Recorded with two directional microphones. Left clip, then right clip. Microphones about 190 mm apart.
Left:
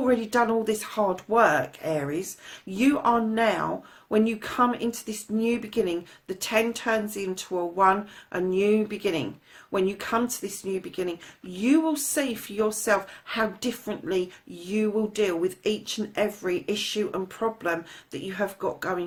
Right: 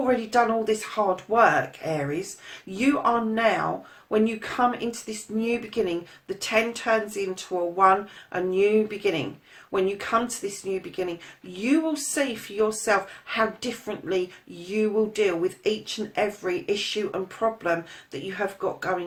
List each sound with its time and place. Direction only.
0.0 s speech: 45° left (ahead or behind)